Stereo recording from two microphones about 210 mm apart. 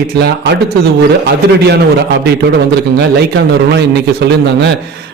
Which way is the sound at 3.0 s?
50° right (ahead or behind).